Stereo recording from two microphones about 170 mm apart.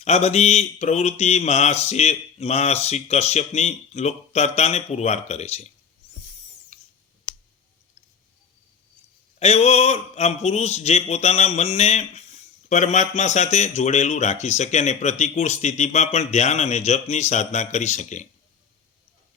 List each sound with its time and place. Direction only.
0.0 s speech: 40° left (ahead or behind)
6.7 s clicking: 45° left (ahead or behind)
9.4 s speech: 40° left (ahead or behind)